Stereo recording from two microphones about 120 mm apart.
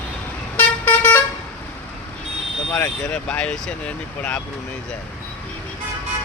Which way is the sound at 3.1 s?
10° left (ahead or behind).